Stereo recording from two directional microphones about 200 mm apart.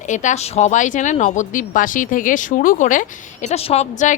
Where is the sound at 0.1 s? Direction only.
40° left (ahead or behind).